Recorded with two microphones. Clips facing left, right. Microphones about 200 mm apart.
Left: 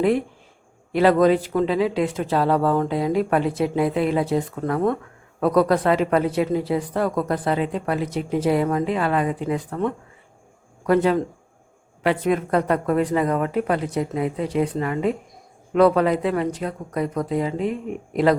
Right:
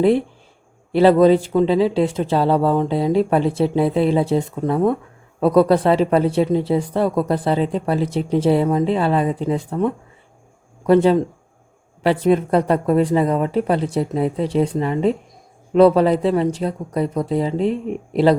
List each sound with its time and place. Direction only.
0.0 s speech: 30° right (ahead or behind)
5.4 s speech: 30° right (ahead or behind)